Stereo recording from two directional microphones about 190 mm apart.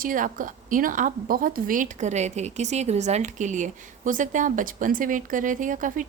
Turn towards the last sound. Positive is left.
turn(degrees=-45)  # may be behind; listen again after turning